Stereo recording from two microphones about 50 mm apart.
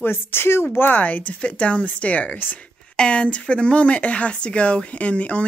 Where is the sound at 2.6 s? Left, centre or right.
Left.